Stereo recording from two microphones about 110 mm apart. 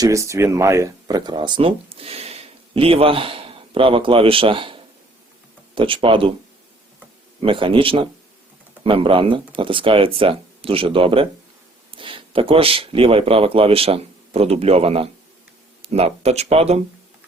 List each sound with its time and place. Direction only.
0.0 s speech: 30° right (ahead or behind); by 6.3 s 55° right (ahead or behind)
7.4 s speech: 50° right (ahead or behind); by 16.8 s 75° right (ahead or behind)